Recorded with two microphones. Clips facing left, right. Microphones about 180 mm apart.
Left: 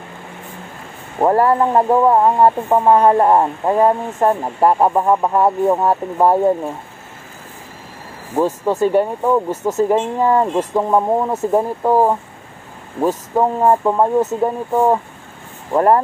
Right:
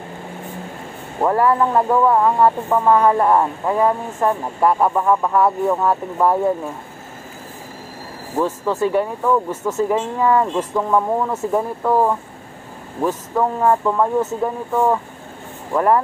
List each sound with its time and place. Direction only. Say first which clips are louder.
1.2 s speech: left 3 dB; 40° left (ahead or behind)
8.4 s speech: left 3 dB; 35° left (ahead or behind)